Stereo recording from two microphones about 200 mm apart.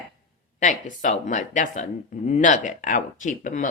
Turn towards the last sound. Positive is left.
turn(degrees=40)  # may be behind; listen again after turning